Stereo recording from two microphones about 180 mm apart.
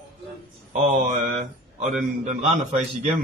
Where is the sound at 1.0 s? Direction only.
45° right (ahead or behind).